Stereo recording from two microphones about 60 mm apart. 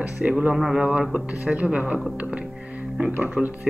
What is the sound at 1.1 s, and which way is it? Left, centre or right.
Speech, right.